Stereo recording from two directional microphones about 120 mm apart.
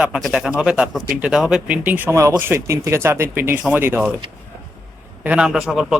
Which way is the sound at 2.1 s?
25° right (ahead or behind).